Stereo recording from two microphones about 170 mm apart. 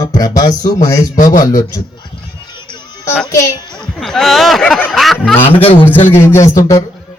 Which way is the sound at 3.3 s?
20° left (ahead or behind).